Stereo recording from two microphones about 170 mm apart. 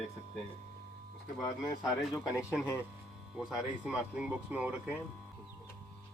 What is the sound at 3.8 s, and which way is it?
Speech, 5° right (ahead or behind).